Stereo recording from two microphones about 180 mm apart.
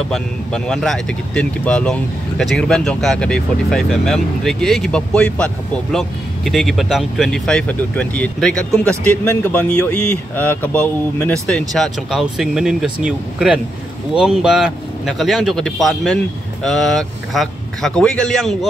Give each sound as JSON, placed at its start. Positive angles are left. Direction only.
{"t": 0.1, "sound": "speech", "side_deg": 0}